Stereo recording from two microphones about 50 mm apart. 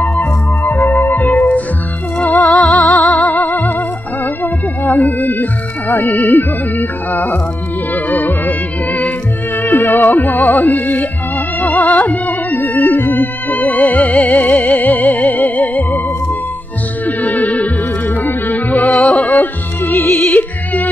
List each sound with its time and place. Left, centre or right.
0.2 s music: left
17.0 s music: left
19.9 s music: left
20.2 s music: left